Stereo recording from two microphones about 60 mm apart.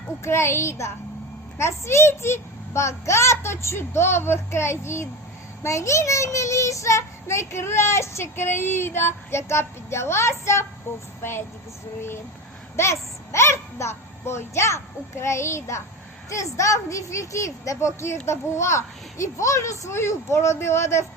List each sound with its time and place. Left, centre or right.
0.2 s a child's voice: left
12.7 s a child's voice: left